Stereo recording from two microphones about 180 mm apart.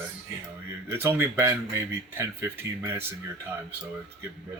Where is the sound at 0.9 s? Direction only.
10° right (ahead or behind).